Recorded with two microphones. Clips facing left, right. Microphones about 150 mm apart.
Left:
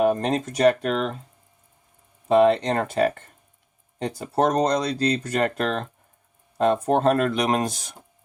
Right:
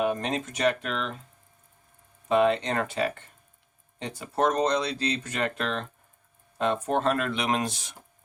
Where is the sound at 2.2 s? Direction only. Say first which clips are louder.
Left 5 dB; 40° left (ahead or behind).